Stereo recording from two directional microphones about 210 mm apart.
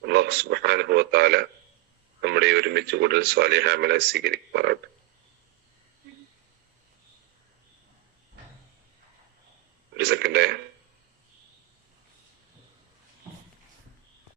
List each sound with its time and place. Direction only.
0.0 s speech: 55° right (ahead or behind)
10.0 s radio: 50° right (ahead or behind)